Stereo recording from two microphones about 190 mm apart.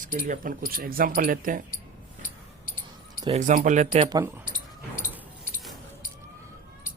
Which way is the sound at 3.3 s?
40° right (ahead or behind).